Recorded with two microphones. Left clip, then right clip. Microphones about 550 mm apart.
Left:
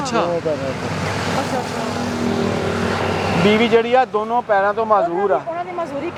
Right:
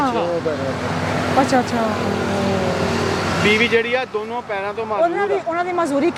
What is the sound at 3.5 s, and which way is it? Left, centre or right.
Speech, left.